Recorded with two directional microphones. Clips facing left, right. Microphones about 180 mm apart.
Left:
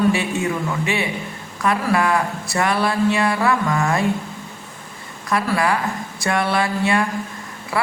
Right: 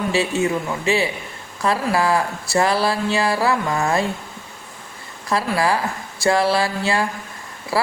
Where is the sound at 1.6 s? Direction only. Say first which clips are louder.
Even; 30° right (ahead or behind).